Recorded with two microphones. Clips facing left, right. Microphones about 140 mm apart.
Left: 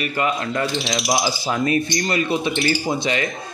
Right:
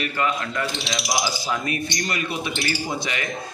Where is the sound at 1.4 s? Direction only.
30° left (ahead or behind).